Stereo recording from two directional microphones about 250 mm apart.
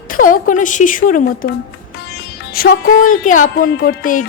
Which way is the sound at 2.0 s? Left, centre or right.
Left.